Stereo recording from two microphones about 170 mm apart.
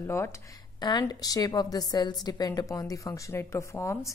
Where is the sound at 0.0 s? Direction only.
15° left (ahead or behind).